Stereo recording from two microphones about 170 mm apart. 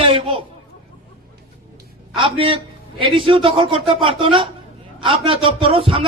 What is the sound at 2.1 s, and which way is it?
A man's voice, 30° right (ahead or behind).